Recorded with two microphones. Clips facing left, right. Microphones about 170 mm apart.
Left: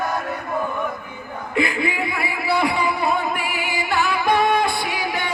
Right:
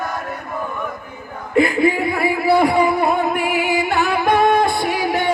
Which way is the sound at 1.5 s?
45° right (ahead or behind).